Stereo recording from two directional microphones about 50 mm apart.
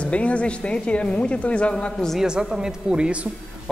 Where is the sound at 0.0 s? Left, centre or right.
Left.